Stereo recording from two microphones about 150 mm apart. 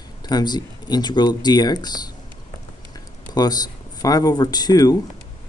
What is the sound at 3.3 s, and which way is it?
Speech, 25° left (ahead or behind).